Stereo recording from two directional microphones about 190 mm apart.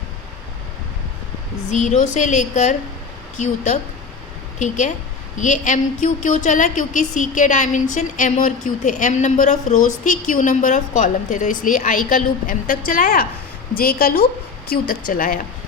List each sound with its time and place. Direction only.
1.7 s a woman's voice: 40° left (ahead or behind)
5.4 s a woman's voice: 40° left (ahead or behind)